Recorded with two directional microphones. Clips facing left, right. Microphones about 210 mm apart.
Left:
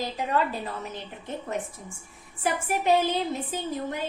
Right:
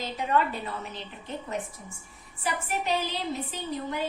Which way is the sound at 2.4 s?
50° left (ahead or behind).